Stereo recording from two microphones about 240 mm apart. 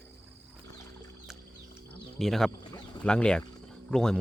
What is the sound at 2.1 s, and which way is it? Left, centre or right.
Speech, centre.